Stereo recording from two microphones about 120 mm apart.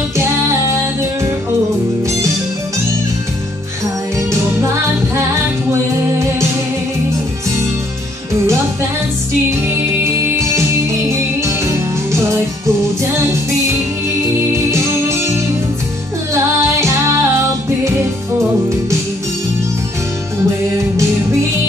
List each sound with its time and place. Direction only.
9.7 s music: 25° right (ahead or behind)
14.5 s music: 25° right (ahead or behind)
16.8 s music: 25° right (ahead or behind)